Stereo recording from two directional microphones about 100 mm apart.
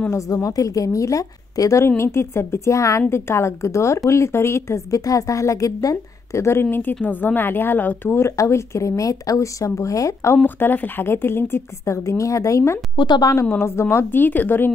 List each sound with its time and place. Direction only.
0.1 s a woman's voice: 35° left (ahead or behind)
12.9 s a woman's voice: 45° left (ahead or behind)
13.6 s a woman's voice: 25° left (ahead or behind)